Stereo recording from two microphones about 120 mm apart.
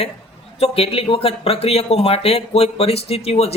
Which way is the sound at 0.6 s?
55° left (ahead or behind).